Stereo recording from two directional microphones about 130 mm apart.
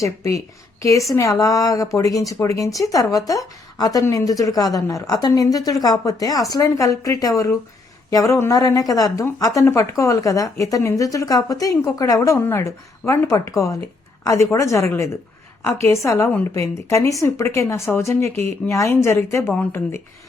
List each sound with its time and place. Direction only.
0.0 s a woman's voice: 25° left (ahead or behind)